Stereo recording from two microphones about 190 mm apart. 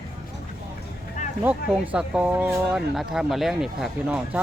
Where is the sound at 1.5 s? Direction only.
5° right (ahead or behind).